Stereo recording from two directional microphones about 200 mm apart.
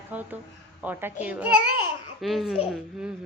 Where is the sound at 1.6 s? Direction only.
90° left.